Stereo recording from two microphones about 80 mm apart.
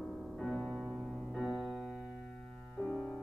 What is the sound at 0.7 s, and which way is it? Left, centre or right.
Music, centre.